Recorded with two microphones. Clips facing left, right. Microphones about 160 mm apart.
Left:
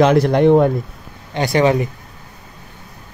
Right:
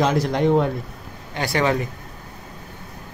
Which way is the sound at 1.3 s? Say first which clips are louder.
Left 6 dB; 20° left (ahead or behind).